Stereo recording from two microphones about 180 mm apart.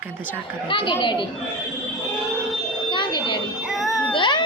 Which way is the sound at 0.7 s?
25° left (ahead or behind).